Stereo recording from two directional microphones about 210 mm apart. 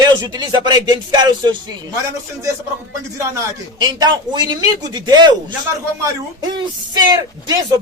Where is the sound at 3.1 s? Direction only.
15° right (ahead or behind).